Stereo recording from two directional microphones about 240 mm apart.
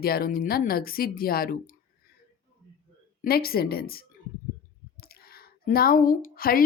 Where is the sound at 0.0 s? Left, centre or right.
Left.